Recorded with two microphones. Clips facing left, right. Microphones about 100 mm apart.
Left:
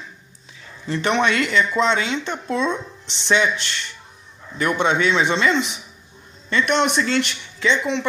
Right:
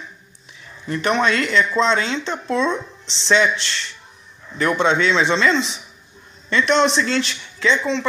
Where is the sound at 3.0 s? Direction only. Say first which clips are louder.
Right 2 dB; 55° left (ahead or behind).